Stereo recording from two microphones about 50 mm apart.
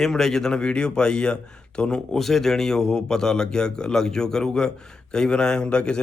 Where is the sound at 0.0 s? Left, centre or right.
Centre.